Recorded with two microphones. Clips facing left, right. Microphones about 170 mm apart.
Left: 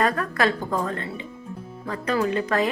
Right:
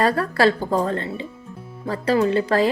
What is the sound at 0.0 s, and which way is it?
A woman's voice, 30° right (ahead or behind).